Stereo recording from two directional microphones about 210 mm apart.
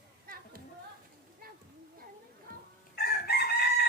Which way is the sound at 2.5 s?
40° right (ahead or behind).